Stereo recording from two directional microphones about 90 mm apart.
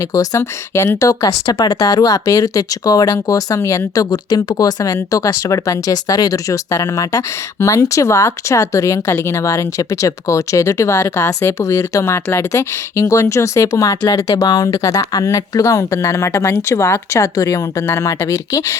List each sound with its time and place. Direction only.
0.0 s speech: 40° left (ahead or behind)
14.4 s speech: 50° left (ahead or behind)